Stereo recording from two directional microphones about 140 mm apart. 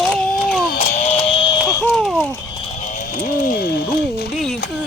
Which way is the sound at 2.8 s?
70° left (ahead or behind).